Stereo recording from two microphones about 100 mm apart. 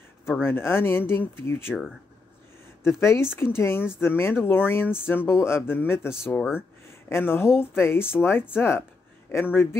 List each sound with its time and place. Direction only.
0.4 s speech: 25° left (ahead or behind)
2.8 s speech: 25° left (ahead or behind)